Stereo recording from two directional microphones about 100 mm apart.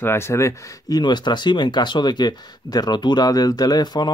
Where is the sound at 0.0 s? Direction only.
25° left (ahead or behind).